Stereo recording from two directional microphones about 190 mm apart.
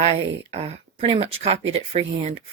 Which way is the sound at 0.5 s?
30° right (ahead or behind).